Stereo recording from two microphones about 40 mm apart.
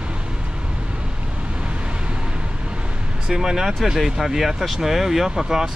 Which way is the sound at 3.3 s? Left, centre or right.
Centre.